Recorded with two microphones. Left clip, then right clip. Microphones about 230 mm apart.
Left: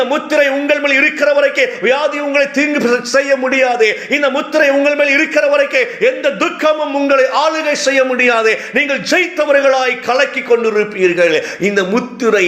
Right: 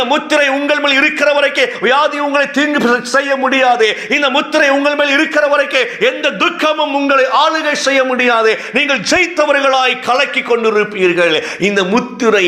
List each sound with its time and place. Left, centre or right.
0.0 s a man's voice: right